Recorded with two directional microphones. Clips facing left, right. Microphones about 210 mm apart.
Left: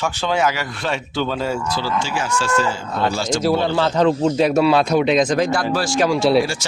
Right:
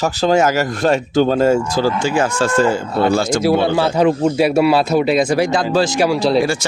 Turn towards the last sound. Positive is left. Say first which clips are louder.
# right 1 dB
turn(degrees=0)  # may be behind; listen again after turning